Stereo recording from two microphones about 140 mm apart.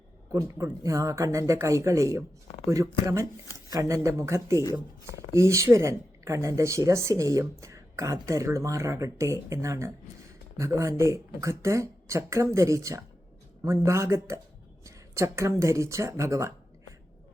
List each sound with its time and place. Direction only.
0.3 s speech: 25° right (ahead or behind)